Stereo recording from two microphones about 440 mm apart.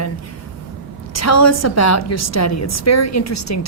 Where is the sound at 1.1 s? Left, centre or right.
Left.